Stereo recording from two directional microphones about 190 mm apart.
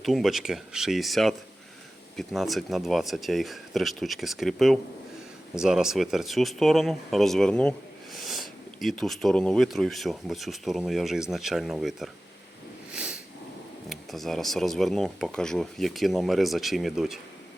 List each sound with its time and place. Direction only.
0.0 s speech: centre (ahead or behind)
12.9 s a sound: 5° right (ahead or behind)
13.9 s speech: centre (ahead or behind)